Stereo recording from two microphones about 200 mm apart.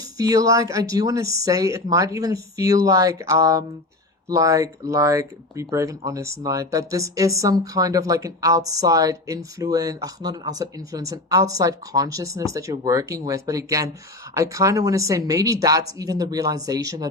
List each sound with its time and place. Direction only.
0.0 s speech: 20° right (ahead or behind)